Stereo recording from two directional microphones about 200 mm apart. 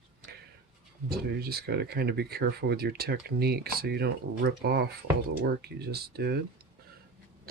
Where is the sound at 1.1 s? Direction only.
50° right (ahead or behind).